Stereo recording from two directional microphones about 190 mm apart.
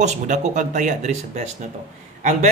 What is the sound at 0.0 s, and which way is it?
Speech, 40° right (ahead or behind).